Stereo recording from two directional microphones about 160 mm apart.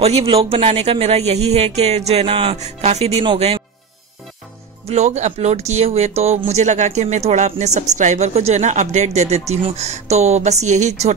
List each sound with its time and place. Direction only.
0.0 s speech: 40° right (ahead or behind)
4.8 s speech: 45° right (ahead or behind)